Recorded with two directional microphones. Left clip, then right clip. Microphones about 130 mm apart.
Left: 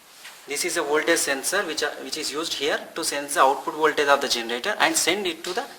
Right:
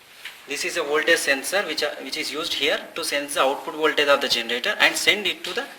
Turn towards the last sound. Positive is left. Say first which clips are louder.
# right 2 dB
turn(degrees=35)  # may be behind; listen again after turning